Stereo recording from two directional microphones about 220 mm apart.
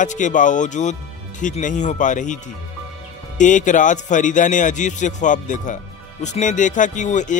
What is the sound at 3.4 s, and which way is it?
Speech, 35° left (ahead or behind).